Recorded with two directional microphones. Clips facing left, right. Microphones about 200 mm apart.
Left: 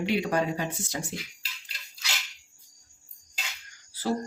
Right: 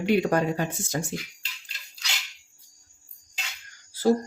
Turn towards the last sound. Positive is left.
turn(degrees=-45)  # may be behind; listen again after turning